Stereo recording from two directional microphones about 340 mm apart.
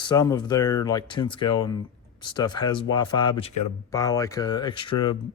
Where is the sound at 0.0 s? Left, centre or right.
Centre.